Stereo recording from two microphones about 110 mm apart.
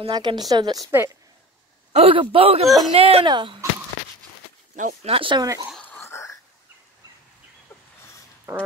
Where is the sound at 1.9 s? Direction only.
60° right (ahead or behind).